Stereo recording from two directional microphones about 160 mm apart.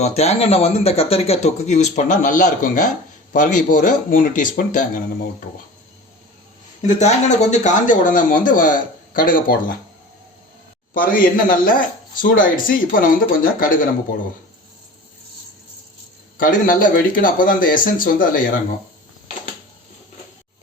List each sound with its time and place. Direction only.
0.0 s speech: 40° left (ahead or behind)
6.8 s speech: 45° left (ahead or behind); by 9.7 s 60° left (ahead or behind)
10.9 s speech: 60° left (ahead or behind)
16.4 s speech: 60° left (ahead or behind)